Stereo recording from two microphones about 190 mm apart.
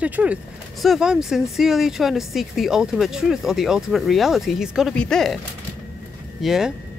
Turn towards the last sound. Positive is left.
turn(degrees=0)  # may be behind; listen again after turning